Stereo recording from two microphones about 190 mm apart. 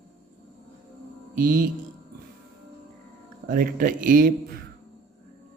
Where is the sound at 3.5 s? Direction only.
45° right (ahead or behind).